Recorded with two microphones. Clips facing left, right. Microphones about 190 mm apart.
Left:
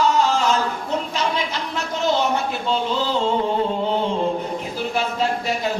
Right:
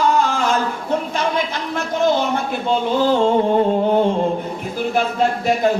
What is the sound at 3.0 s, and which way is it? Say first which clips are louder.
Music: right 6 dB; 50° right (ahead or behind).